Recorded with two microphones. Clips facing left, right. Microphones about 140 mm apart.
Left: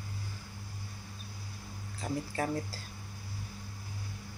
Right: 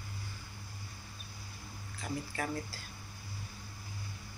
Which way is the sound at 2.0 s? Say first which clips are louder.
Left 4 dB; 35° left (ahead or behind).